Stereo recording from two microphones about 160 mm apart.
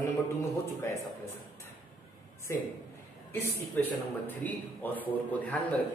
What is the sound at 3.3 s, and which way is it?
Speech, 15° left (ahead or behind).